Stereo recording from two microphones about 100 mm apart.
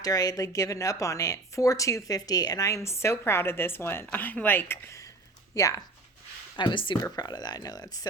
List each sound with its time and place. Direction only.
0.0 s a woman's voice: 40° left (ahead or behind)
6.6 s speech: 55° left (ahead or behind)
7.0 s a woman's voice: 40° left (ahead or behind)